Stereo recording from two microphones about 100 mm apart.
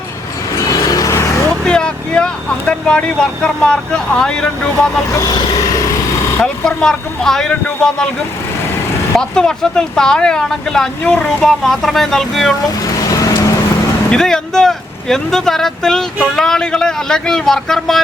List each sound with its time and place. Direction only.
0.5 s vehicle: 35° left (ahead or behind)
1.5 s vehicle: 10° left (ahead or behind)
3.4 s speech: 5° left (ahead or behind)
5.2 s speech: 35° left (ahead or behind)
6.4 s speech: 5° left (ahead or behind)
9.1 s speech: 5° left (ahead or behind)
13.0 s vehicle: 35° left (ahead or behind)
14.1 s speech: 5° left (ahead or behind)